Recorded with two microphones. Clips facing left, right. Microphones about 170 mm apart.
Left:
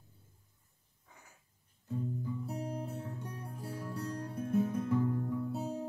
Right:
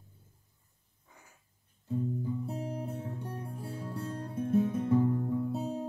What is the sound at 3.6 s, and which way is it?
Guitar, 25° right (ahead or behind).